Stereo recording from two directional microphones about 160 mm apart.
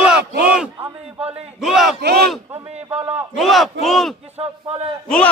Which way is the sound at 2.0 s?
90° right.